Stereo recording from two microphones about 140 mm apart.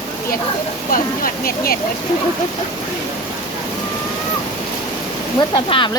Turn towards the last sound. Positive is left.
turn(degrees=35)  # may be behind; listen again after turning